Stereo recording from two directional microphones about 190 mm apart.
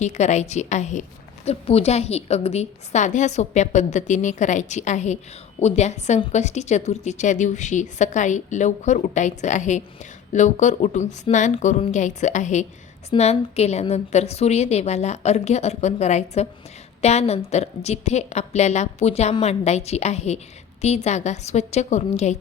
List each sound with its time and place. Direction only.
0.0 s a woman's voice: 35° left (ahead or behind)